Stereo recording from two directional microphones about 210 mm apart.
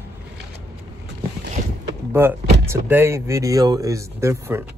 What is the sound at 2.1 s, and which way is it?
Speech, 10° right (ahead or behind).